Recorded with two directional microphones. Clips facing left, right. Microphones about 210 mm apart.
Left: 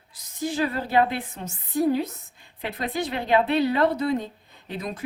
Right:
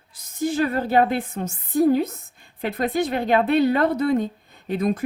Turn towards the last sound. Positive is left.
turn(degrees=-50)  # may be behind; listen again after turning